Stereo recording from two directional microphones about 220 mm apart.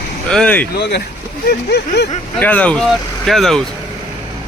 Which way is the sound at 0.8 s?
50° left (ahead or behind).